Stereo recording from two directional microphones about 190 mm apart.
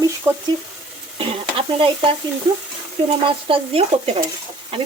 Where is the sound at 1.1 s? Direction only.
30° right (ahead or behind).